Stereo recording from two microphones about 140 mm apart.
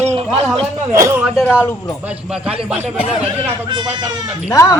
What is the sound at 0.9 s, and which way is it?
Speech, 20° right (ahead or behind).